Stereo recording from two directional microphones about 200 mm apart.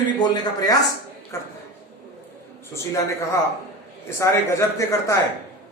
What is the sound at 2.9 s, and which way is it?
Speech, 15° left (ahead or behind).